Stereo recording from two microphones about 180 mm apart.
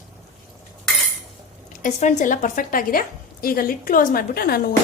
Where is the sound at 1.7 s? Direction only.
45° left (ahead or behind).